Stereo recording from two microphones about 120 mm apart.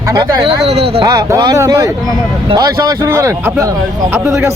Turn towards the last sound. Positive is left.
turn(degrees=-20)  # may be behind; listen again after turning